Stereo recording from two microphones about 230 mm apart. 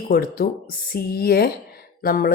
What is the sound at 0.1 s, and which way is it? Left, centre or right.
Speech, left.